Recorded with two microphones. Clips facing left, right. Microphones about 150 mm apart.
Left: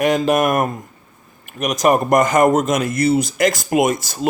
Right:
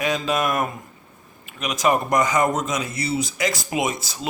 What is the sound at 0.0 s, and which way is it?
Speech, 50° left (ahead or behind).